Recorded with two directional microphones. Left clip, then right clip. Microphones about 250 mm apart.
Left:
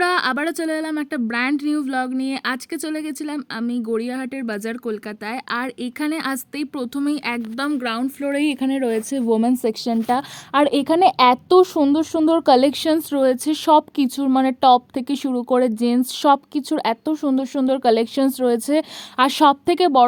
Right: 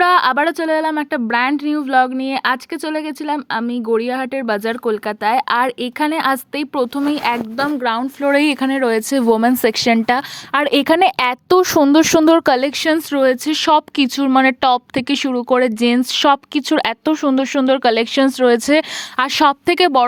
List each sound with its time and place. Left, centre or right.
0.0 s speech: centre; by 20.1 s right